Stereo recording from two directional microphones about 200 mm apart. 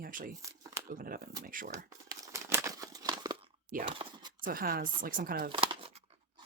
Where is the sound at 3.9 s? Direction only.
25° right (ahead or behind).